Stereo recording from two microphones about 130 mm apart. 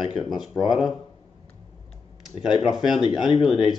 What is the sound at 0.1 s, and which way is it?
Speech, 5° right (ahead or behind).